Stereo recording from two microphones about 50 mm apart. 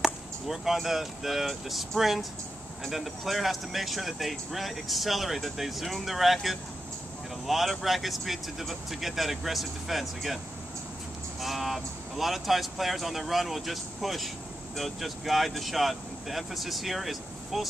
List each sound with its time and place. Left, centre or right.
0.0 s speech: centre
11.4 s speech: centre